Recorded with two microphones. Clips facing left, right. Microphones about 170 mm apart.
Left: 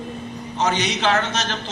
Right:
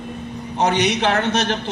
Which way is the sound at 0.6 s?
60° right (ahead or behind).